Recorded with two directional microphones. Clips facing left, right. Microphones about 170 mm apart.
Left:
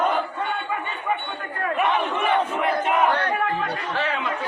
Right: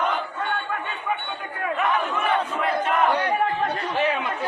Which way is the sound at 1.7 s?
20° left (ahead or behind).